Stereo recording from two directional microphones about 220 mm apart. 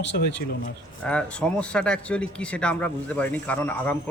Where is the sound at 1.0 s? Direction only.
5° left (ahead or behind).